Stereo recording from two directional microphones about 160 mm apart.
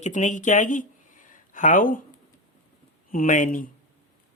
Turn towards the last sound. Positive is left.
turn(degrees=55)  # may be behind; listen again after turning